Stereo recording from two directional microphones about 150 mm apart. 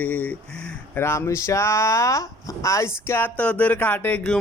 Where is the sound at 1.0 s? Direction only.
20° left (ahead or behind).